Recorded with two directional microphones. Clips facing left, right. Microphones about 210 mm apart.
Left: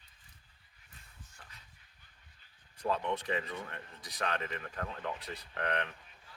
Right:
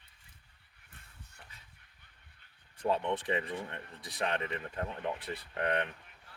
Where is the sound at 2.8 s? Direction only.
25° right (ahead or behind).